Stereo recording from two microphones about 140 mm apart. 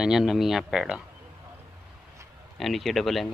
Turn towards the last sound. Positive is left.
turn(degrees=0)  # may be behind; listen again after turning